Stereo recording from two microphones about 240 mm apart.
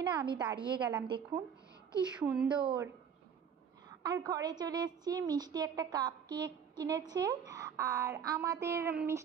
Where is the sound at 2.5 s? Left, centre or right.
Centre.